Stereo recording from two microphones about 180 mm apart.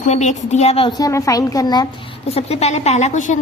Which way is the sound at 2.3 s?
35° left (ahead or behind).